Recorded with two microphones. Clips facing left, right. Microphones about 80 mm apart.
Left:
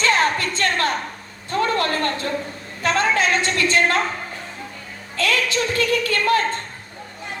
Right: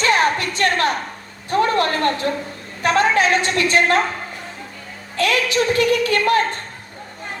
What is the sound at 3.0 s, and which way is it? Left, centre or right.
A woman's voice, right.